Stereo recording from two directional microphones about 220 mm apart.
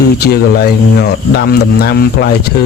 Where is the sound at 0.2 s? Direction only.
45° left (ahead or behind).